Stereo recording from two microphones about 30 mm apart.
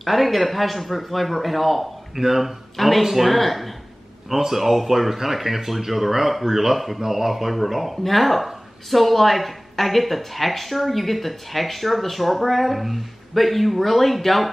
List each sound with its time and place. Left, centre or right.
0.0 s speech: centre
2.1 s speech: centre
4.5 s speech: centre